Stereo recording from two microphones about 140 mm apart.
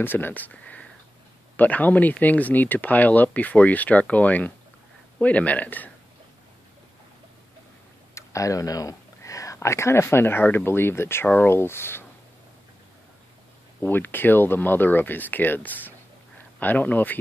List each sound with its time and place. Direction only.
0.0 s speech: 15° left (ahead or behind)
8.1 s speech: 20° left (ahead or behind)
13.7 s speech: 15° left (ahead or behind)